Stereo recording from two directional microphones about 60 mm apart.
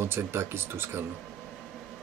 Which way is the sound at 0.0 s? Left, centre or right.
Right.